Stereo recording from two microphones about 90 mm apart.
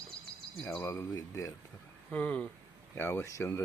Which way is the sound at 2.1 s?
15° left (ahead or behind).